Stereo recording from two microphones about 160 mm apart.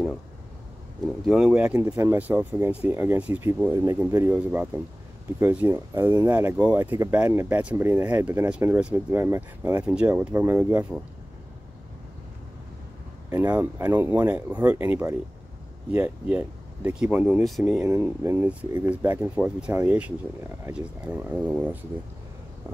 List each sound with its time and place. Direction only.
1.0 s speech: centre (ahead or behind)
13.3 s speech: 10° right (ahead or behind)
17.8 s speech: 20° right (ahead or behind)